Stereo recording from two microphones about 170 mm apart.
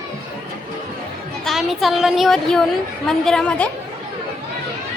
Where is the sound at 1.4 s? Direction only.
Centre (ahead or behind).